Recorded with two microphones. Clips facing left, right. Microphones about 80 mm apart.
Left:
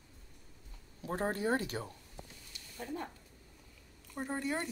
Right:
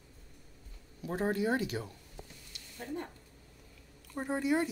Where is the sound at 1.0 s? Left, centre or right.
Left.